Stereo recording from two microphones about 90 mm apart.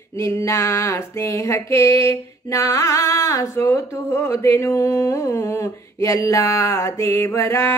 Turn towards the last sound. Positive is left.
turn(degrees=30)  # may be behind; listen again after turning